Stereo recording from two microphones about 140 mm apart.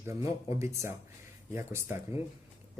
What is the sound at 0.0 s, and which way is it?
Speech, 20° right (ahead or behind).